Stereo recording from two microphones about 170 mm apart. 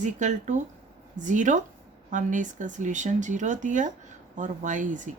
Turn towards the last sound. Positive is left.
turn(degrees=-45)  # may be behind; listen again after turning